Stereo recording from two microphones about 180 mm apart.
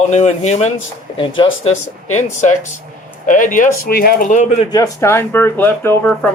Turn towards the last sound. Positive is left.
turn(degrees=10)  # may be behind; listen again after turning